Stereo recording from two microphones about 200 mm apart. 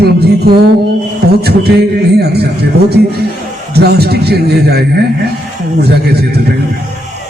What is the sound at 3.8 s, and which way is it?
A man's voice, 55° right (ahead or behind).